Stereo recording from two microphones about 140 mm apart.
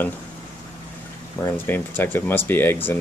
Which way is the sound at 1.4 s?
15° left (ahead or behind).